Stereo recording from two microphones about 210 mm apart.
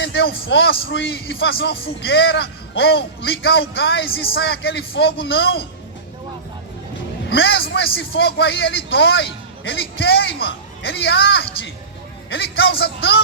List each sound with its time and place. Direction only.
0.0 s speech: 55° left (ahead or behind)
7.3 s a man's voice: 65° left (ahead or behind)
7.6 s speech: 55° left (ahead or behind)